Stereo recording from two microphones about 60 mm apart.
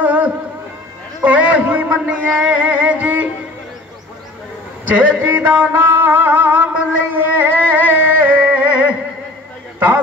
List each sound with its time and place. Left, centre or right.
0.0 s music: right
4.8 s music: right